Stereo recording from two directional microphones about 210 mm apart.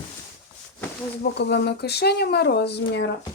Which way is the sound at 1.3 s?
55° left (ahead or behind).